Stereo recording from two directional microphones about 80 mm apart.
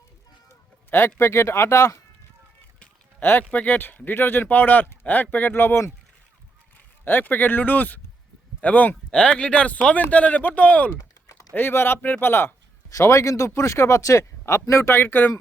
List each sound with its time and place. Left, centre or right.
0.9 s speech: left
3.2 s speech: left
12.9 s speech: left